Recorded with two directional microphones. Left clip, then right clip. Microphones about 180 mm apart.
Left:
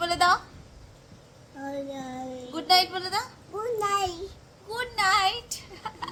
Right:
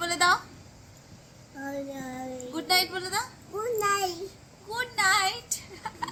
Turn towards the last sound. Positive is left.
turn(degrees=25)  # may be behind; listen again after turning